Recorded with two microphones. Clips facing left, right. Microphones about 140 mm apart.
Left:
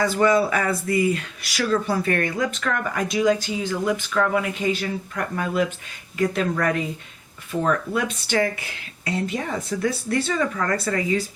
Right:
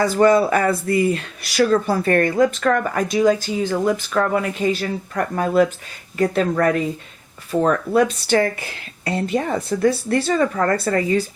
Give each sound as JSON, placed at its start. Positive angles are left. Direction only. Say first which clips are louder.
{"t": 0.0, "sound": "speech", "louder": "right 4 dB", "side_deg": -40}